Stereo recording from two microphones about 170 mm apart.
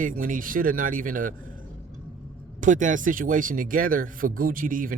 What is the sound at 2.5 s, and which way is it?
Speech, 50° right (ahead or behind).